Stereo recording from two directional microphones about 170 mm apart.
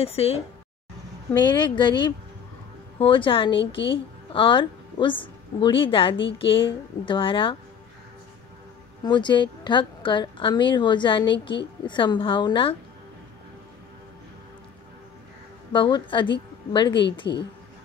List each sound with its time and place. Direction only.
0.0 s a woman's voice: 35° left (ahead or behind)
9.0 s a woman's voice: 25° left (ahead or behind)
15.7 s a woman's voice: 30° left (ahead or behind)